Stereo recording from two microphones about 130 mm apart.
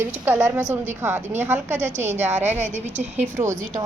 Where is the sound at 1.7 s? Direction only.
65° right (ahead or behind).